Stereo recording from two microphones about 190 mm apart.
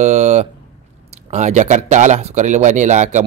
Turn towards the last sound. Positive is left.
turn(degrees=-40)  # may be behind; listen again after turning